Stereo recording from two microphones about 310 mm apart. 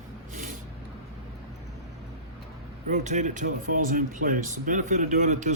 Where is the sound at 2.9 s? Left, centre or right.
Right.